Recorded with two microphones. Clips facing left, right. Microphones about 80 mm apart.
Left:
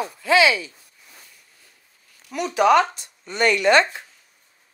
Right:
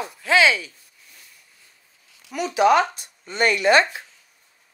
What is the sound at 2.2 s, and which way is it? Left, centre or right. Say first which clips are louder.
Speech: even; centre.